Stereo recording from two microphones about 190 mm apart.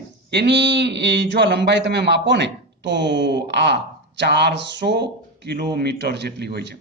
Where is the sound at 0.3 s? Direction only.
65° right (ahead or behind).